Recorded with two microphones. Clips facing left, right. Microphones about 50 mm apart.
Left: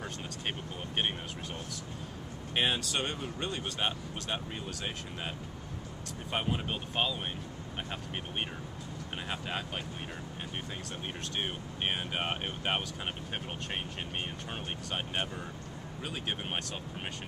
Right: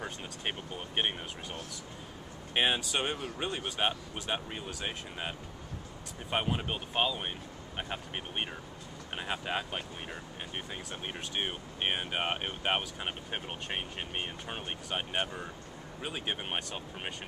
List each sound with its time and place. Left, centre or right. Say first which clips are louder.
0.0 s speech: right 1 dB; centre
2.5 s speech: right 1 dB; centre
6.3 s speech: right 1 dB; centre
9.3 s speech: right 3 dB; centre
11.3 s speech: right 1 dB; centre